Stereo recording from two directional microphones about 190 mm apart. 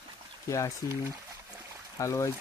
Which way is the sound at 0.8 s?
20° left (ahead or behind).